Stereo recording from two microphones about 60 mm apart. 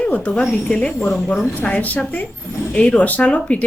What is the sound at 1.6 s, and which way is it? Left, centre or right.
Speech, left.